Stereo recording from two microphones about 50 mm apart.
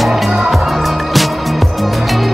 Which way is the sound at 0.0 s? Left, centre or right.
Centre.